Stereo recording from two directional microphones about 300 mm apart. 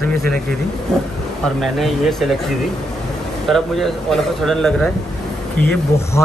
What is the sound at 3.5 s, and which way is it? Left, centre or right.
Speech, centre.